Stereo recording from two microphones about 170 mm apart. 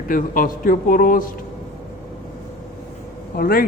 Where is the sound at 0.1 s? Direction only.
55° left (ahead or behind).